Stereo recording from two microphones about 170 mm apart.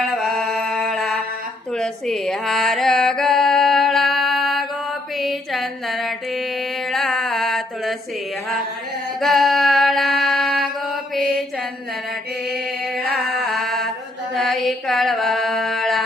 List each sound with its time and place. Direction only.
0.1 s a sound: centre (ahead or behind)
5.1 s mantra: centre (ahead or behind)
9.2 s mantra: centre (ahead or behind)
12.5 s music: 70° right (ahead or behind)
13.5 s mantra: centre (ahead or behind)